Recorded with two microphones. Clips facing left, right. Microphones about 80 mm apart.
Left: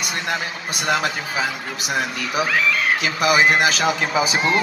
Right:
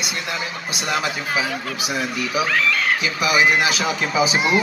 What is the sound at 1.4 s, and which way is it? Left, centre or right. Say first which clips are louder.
Speech: even; left.